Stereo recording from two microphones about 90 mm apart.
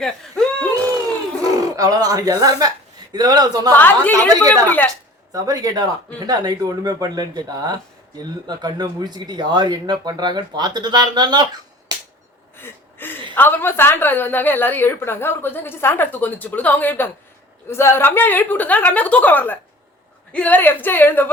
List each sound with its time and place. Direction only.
0.0 s a sound: 5° left (ahead or behind)
1.5 s speech: 40° right (ahead or behind)
3.7 s a woman's voice: 20° left (ahead or behind)
5.3 s speech: 45° right (ahead or behind)
12.5 s a sound: 25° left (ahead or behind)
13.3 s a woman's voice: 20° left (ahead or behind)